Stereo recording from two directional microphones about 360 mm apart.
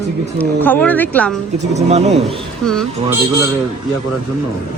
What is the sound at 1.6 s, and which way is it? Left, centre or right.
Speech, centre.